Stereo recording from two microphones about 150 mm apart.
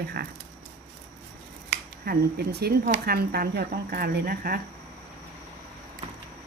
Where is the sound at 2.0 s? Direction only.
90° right.